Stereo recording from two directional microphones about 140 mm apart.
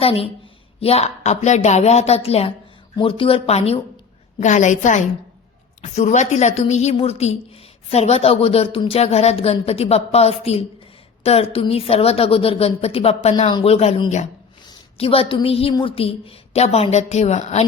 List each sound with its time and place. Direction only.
0.0 s speech: 45° left (ahead or behind)
4.4 s a woman's voice: 60° left (ahead or behind)